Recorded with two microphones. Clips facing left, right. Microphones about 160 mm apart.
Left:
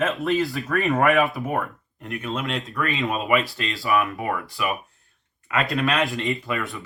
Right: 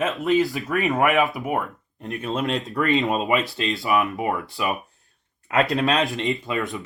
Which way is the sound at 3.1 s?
20° right (ahead or behind).